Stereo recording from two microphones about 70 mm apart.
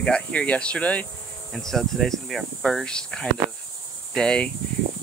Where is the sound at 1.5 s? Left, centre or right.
Centre.